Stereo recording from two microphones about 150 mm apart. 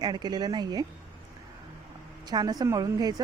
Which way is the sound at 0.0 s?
30° right (ahead or behind).